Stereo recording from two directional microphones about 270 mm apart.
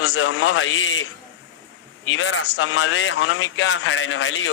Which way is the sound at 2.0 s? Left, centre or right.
Left.